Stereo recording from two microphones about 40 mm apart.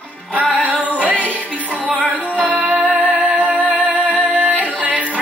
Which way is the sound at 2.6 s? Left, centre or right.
Right.